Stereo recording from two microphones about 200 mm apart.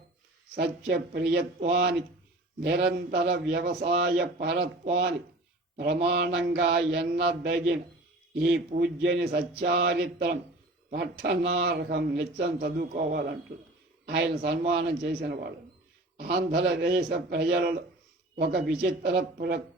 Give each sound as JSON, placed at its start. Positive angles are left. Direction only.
{"t": 0.5, "sound": "mantra", "side_deg": -55}
{"t": 1.7, "sound": "a man's voice", "side_deg": -55}
{"t": 3.9, "sound": "mantra", "side_deg": -60}
{"t": 10.8, "sound": "a man's voice", "side_deg": -55}
{"t": 14.1, "sound": "mantra", "side_deg": -55}
{"t": 14.7, "sound": "a man's voice", "side_deg": -55}
{"t": 16.1, "sound": "mantra", "side_deg": -55}
{"t": 18.8, "sound": "a man's voice", "side_deg": -55}